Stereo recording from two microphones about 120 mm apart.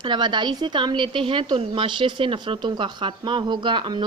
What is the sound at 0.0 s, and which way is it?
A woman's voice, 40° right (ahead or behind).